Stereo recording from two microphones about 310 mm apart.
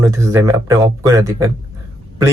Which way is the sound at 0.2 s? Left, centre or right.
Centre.